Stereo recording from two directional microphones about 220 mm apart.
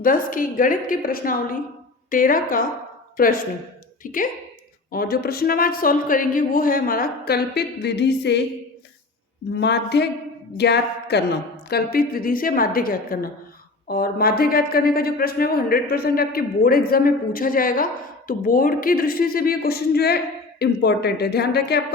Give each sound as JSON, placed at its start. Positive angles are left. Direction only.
{"t": 0.0, "sound": "speech", "side_deg": 40}
{"t": 9.6, "sound": "speech", "side_deg": 50}